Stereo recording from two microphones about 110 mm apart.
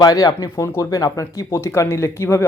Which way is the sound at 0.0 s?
35° left (ahead or behind).